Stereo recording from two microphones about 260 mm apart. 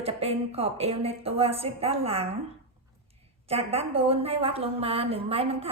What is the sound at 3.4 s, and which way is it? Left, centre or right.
A woman's voice, right.